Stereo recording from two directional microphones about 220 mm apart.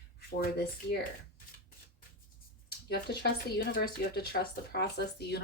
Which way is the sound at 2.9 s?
50° left (ahead or behind).